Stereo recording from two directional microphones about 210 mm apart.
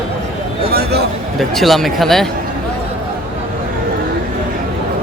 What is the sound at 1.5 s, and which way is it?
Speech, centre (ahead or behind).